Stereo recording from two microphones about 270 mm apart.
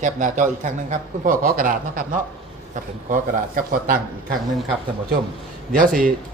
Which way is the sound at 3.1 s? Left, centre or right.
Right.